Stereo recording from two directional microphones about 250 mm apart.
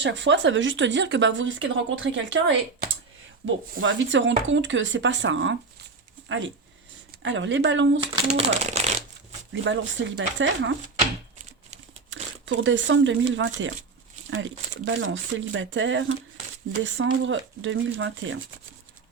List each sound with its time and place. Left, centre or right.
0.0 s speech: right
8.1 s speech: right
9.5 s speech: right
12.1 s speech: right